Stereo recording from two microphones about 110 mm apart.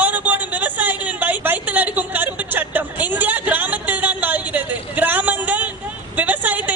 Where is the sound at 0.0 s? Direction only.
15° right (ahead or behind).